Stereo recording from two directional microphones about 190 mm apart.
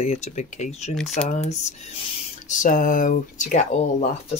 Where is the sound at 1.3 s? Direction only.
35° left (ahead or behind).